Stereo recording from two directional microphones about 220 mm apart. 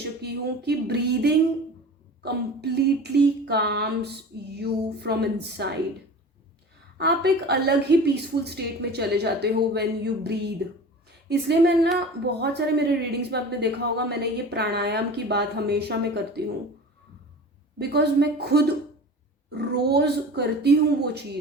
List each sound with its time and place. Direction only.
0.0 s a sound: 50° right (ahead or behind)
2.2 s a woman's voice: 50° right (ahead or behind)
7.0 s a woman's voice: 50° right (ahead or behind)
17.7 s a woman's voice: 50° right (ahead or behind)